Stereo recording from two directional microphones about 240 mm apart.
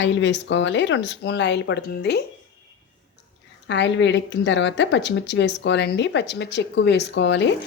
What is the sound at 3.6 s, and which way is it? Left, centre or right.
A woman's voice, left.